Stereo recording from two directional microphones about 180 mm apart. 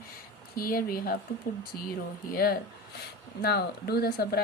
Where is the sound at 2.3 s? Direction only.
60° left (ahead or behind).